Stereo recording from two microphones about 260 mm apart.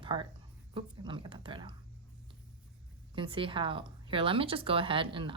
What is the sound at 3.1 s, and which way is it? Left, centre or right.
A woman's voice, centre.